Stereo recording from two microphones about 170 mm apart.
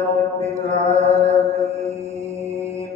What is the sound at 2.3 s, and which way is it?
Mantra, 15° right (ahead or behind).